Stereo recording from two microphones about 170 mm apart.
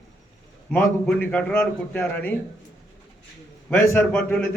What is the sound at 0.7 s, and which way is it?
A man's voice, 10° left (ahead or behind).